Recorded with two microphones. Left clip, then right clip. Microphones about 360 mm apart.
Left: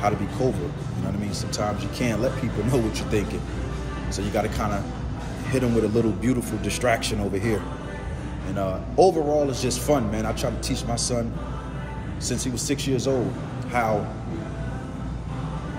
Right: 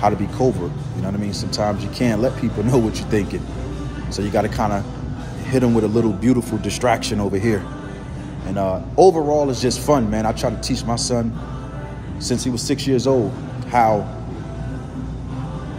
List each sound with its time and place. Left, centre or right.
0.4 s a man's voice: centre
12.3 s speech: centre